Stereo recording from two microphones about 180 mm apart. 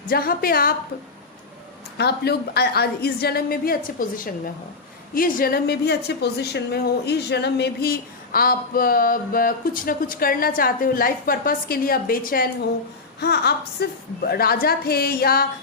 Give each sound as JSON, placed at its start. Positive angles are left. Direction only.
{"t": 0.1, "sound": "a woman's voice", "side_deg": 55}
{"t": 2.0, "sound": "a woman's voice", "side_deg": 65}